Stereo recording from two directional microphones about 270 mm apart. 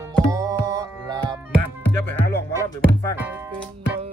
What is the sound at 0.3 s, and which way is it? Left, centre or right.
Music, centre.